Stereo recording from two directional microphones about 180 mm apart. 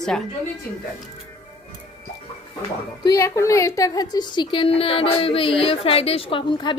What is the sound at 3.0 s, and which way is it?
A woman's voice, 20° left (ahead or behind).